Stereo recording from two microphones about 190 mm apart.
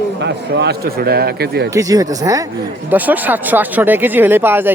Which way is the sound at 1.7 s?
15° right (ahead or behind).